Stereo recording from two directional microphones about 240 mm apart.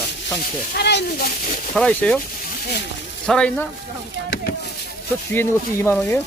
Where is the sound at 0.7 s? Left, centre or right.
Left.